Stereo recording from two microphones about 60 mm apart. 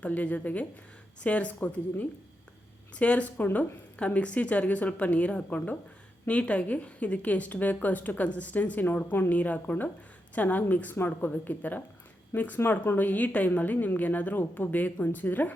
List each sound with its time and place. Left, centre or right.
0.0 s a woman's voice: left